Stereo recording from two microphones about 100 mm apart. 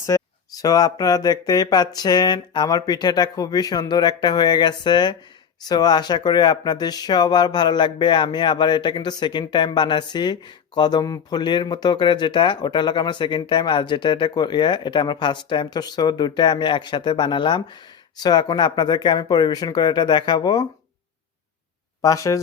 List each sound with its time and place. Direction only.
0.0 s speech: 35° left (ahead or behind)
22.0 s speech: 35° left (ahead or behind)